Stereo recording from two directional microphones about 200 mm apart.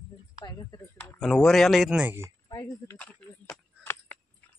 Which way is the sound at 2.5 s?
20° left (ahead or behind).